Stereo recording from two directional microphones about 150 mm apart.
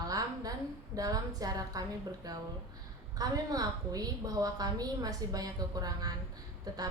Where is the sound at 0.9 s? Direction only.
25° right (ahead or behind).